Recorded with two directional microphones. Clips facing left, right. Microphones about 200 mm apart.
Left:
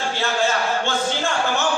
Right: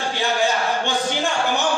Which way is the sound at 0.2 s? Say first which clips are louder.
Right 1 dB; 15° right (ahead or behind).